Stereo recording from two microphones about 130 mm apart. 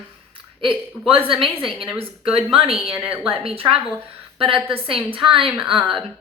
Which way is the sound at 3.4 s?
45° right (ahead or behind).